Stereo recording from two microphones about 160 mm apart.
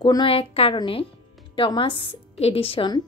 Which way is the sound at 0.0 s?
30° left (ahead or behind).